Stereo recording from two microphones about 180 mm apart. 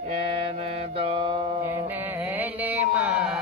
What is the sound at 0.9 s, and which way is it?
Mantra, 30° right (ahead or behind).